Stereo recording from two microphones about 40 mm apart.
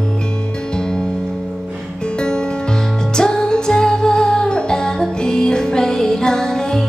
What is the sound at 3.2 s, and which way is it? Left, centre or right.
Music, centre.